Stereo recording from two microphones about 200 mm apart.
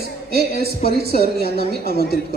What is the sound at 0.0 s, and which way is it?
A woman's voice, 50° right (ahead or behind).